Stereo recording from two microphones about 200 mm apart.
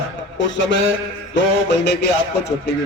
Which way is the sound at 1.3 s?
60° left (ahead or behind).